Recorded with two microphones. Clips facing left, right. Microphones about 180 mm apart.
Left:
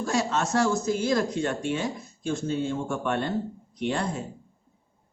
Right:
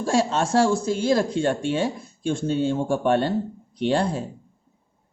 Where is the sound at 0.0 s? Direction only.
30° right (ahead or behind).